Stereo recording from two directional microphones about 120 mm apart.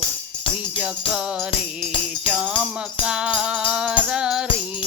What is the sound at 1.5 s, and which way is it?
Music, 45° left (ahead or behind).